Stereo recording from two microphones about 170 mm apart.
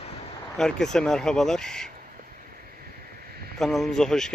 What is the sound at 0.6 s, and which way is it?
Speech, 5° left (ahead or behind).